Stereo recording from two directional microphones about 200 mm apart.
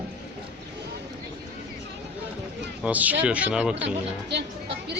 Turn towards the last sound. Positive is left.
turn(degrees=-60)  # may be behind; listen again after turning